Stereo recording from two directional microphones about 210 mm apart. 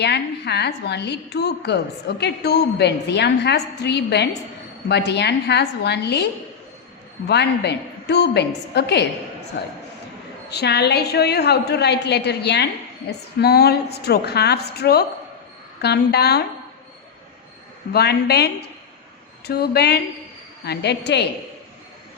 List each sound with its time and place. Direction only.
0.0 s a woman's voice: 55° left (ahead or behind)
7.3 s a woman's voice: 55° left (ahead or behind)
17.9 s a woman's voice: 50° left (ahead or behind)